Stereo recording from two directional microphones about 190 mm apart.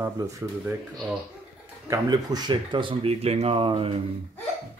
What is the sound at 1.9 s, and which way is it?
Speech, 20° right (ahead or behind).